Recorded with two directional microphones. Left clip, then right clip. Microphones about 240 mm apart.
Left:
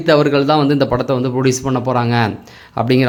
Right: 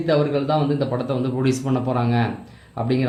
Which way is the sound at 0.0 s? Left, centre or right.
Left.